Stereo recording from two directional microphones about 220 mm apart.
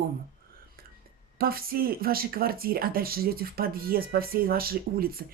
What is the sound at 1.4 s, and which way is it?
Speech, 45° right (ahead or behind).